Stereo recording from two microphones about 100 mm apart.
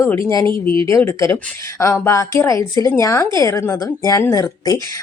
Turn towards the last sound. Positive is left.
turn(degrees=35)  # may be behind; listen again after turning